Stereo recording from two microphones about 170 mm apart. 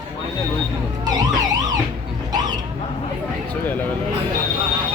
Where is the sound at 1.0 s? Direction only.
25° right (ahead or behind).